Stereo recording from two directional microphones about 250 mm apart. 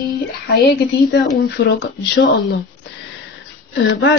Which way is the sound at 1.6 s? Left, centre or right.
Left.